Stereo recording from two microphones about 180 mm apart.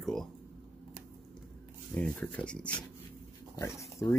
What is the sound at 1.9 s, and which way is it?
Speech, 5° left (ahead or behind).